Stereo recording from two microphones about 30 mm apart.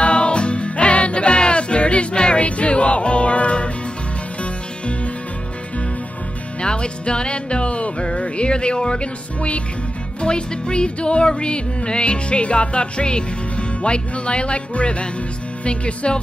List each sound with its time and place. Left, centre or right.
0.0 s music: left
6.6 s music: left
8.2 s speech: left
10.2 s music: left